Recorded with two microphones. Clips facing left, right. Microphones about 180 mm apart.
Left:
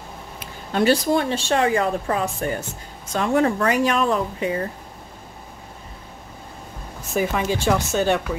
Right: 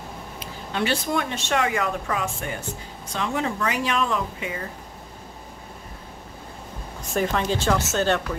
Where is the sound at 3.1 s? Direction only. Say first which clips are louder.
Left 7 dB; 50° left (ahead or behind).